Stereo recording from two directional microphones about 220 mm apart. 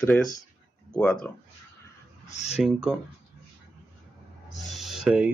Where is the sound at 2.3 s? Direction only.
30° left (ahead or behind).